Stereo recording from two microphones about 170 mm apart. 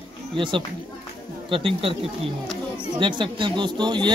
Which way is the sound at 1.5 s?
30° right (ahead or behind).